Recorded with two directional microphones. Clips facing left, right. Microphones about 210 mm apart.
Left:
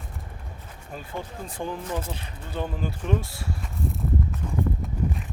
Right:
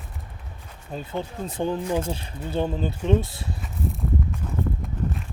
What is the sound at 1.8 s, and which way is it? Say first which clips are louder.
Speech: right 6 dB; 10° right (ahead or behind).